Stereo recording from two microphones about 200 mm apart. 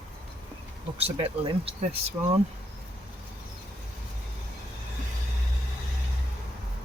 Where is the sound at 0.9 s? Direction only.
30° right (ahead or behind).